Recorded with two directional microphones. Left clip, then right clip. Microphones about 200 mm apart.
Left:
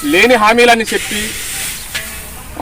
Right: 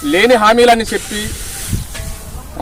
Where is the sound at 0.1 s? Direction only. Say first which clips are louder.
Left 1 dB; 15° right (ahead or behind).